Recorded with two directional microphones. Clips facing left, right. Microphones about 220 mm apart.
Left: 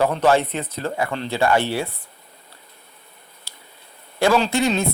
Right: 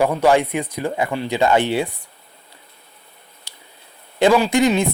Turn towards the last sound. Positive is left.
turn(degrees=-15)  # may be behind; listen again after turning